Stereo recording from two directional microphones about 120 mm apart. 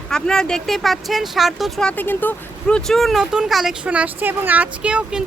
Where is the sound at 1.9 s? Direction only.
15° left (ahead or behind).